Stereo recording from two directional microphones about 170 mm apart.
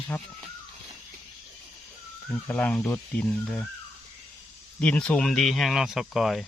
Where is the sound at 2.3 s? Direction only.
10° left (ahead or behind).